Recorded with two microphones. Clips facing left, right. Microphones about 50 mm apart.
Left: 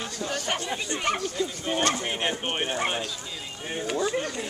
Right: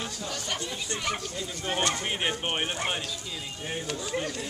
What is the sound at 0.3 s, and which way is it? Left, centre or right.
Speech, left.